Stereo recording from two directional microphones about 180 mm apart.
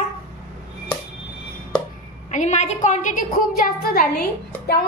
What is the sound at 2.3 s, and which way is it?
A woman's voice, 40° left (ahead or behind).